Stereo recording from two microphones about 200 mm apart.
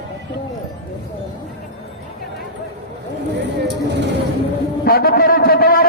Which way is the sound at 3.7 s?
60° right (ahead or behind).